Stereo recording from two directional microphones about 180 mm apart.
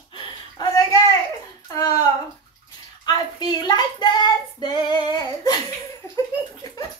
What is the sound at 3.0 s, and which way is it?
Child singing, 20° left (ahead or behind).